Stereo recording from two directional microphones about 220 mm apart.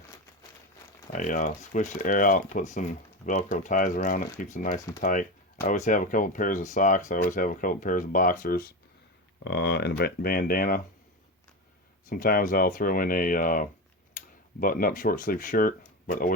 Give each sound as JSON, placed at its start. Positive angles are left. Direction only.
{"t": 1.1, "sound": "speech", "side_deg": 35}
{"t": 12.0, "sound": "speech", "side_deg": 40}